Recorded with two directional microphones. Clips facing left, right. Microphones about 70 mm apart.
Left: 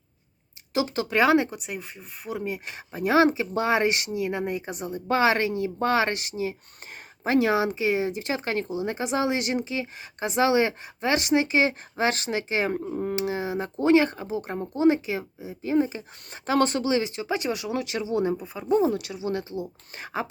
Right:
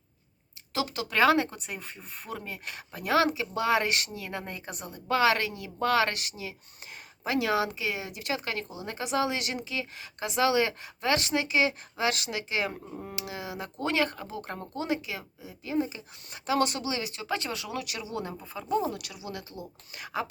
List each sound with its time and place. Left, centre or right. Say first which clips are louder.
0.7 s speech: left 6 dB; left
1.2 s speech: left 2 dB; centre
14.8 s speech: left 13 dB; left